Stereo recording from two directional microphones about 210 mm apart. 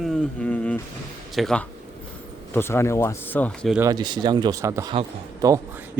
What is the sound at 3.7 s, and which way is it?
Speech, 15° right (ahead or behind).